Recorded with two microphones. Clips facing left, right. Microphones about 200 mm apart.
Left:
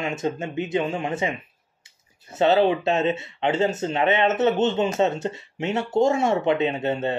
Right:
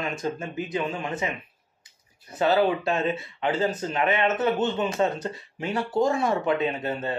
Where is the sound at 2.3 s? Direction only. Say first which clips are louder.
Left 3 dB; 25° left (ahead or behind).